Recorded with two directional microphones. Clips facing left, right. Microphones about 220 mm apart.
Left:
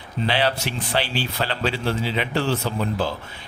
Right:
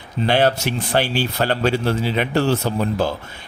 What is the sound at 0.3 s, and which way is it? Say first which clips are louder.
Speech: right 6 dB; 50° right (ahead or behind).